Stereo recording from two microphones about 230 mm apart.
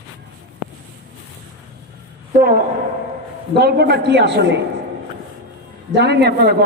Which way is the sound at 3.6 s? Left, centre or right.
Right.